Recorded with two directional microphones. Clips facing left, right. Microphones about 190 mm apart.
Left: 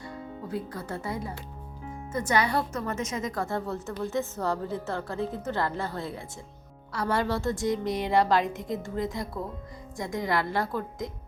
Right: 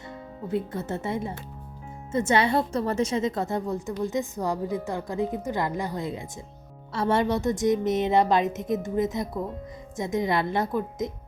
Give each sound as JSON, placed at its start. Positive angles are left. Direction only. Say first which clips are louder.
{"t": 0.1, "sound": "a woman's voice", "louder": "right 5 dB", "side_deg": -25}